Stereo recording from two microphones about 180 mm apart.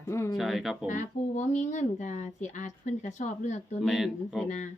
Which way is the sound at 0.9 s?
45° left (ahead or behind).